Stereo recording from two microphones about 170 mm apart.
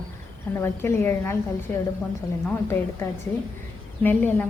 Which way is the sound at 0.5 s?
15° left (ahead or behind).